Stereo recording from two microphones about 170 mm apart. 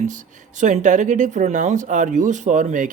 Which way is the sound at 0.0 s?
45° right (ahead or behind).